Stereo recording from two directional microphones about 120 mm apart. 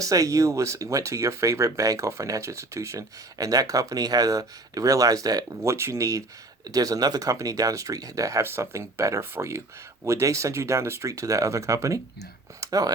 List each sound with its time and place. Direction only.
0.0 s speech: 30° right (ahead or behind)